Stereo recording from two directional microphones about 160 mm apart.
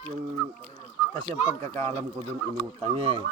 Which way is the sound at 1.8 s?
40° right (ahead or behind).